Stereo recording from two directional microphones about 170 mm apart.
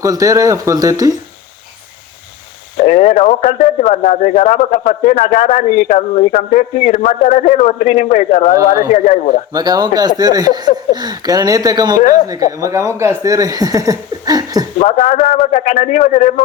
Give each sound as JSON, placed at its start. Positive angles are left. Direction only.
{"t": 0.0, "sound": "speech", "side_deg": -20}
{"t": 2.7, "sound": "speech", "side_deg": 45}
{"t": 9.5, "sound": "a man's voice", "side_deg": -25}
{"t": 14.8, "sound": "speech", "side_deg": 45}